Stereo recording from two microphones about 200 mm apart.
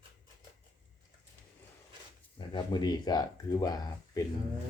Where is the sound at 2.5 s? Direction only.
20° left (ahead or behind).